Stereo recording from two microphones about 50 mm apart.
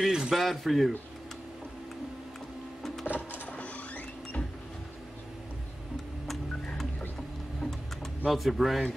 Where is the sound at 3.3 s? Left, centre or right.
Left.